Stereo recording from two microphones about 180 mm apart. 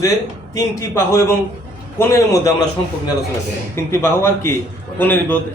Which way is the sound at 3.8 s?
15° left (ahead or behind).